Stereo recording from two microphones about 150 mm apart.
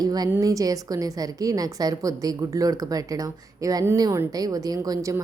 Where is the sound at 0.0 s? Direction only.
25° right (ahead or behind).